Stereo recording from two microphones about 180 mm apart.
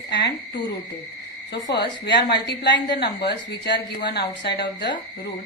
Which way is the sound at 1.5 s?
70° left (ahead or behind).